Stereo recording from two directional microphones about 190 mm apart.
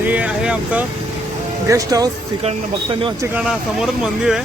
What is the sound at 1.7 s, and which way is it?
Speech, 20° right (ahead or behind).